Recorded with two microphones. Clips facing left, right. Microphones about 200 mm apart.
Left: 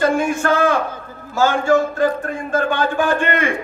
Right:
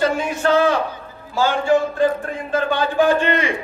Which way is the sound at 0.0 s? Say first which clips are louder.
Left 2 dB; 50° left (ahead or behind).